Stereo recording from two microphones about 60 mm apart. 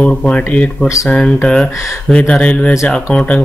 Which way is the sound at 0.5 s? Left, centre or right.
Left.